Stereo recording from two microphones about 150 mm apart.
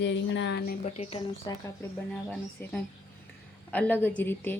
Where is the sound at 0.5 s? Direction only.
90° left.